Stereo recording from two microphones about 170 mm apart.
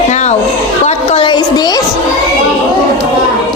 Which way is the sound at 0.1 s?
40° left (ahead or behind).